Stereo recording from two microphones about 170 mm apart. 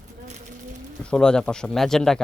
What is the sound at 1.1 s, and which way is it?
Speech, 5° left (ahead or behind).